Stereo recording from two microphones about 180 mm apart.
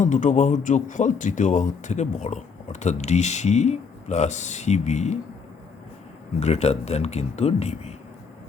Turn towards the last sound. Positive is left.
turn(degrees=35)  # may be behind; listen again after turning